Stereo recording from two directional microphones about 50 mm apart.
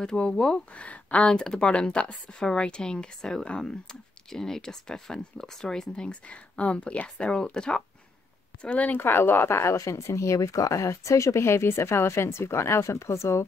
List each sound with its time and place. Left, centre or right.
0.0 s speech: centre
0.7 s speech: left
8.6 s speech: left
8.9 s speech: left